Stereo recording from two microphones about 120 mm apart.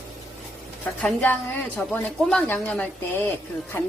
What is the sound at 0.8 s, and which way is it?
A woman's voice, 10° left (ahead or behind).